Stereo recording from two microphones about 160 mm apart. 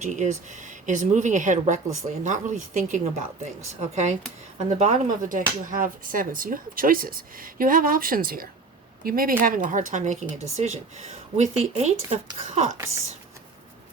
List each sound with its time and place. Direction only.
0.0 s speech: 50° right (ahead or behind)
12.7 s speech: 20° right (ahead or behind)